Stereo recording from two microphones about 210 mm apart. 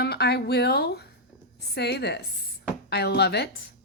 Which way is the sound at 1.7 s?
50° left (ahead or behind).